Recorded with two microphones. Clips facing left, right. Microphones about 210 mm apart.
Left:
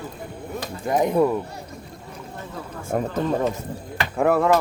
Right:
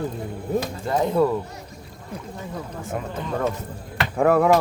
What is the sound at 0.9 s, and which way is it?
Speech, 15° left (ahead or behind).